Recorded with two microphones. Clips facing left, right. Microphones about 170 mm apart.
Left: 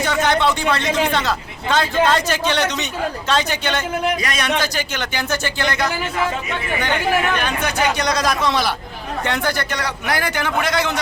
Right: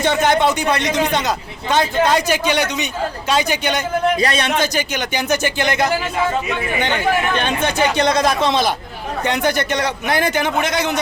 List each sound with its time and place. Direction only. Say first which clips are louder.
0.0 s a sound: right 3 dB; 25° right (ahead or behind)
0.6 s a man's voice: right 1 dB; 20° right (ahead or behind)
4.2 s a man's voice: right 3 dB; 30° right (ahead or behind)
7.3 s a man's voice: right 3 dB; 25° right (ahead or behind)